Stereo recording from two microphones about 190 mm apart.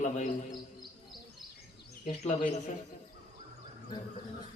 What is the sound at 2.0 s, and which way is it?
Speech, 35° left (ahead or behind).